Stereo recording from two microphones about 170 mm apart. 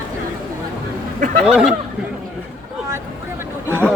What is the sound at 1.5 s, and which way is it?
Speech, 5° right (ahead or behind).